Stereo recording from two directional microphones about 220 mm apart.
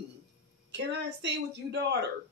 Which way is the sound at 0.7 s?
50° right (ahead or behind).